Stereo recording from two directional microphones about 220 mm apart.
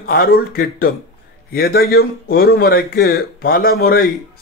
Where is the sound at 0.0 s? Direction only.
40° left (ahead or behind).